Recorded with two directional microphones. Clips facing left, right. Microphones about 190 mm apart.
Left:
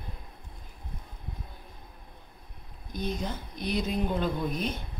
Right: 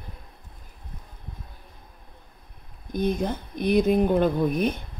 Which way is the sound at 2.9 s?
55° right (ahead or behind).